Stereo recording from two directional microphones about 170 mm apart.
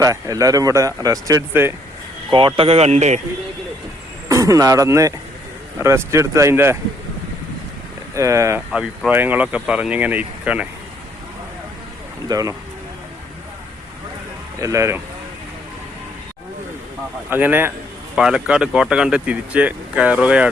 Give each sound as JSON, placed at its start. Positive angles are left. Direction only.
{"t": 0.0, "sound": "speech", "side_deg": -20}
{"t": 2.6, "sound": "speech", "side_deg": -35}
{"t": 4.3, "sound": "speech", "side_deg": -20}
{"t": 8.1, "sound": "speech", "side_deg": -20}
{"t": 8.7, "sound": "speech", "side_deg": -5}
{"t": 12.3, "sound": "speech", "side_deg": -20}
{"t": 14.6, "sound": "speech", "side_deg": -15}
{"t": 17.2, "sound": "speech", "side_deg": -10}